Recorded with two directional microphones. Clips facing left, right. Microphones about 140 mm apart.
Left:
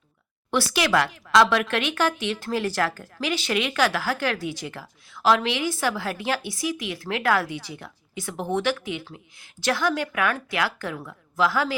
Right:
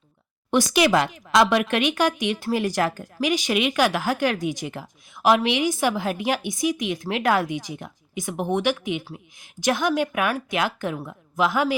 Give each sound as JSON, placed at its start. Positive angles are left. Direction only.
{"t": 0.5, "sound": "a woman's voice", "side_deg": -15}